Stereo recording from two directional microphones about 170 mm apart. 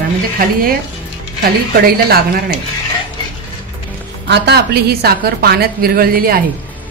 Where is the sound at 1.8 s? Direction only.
60° right (ahead or behind).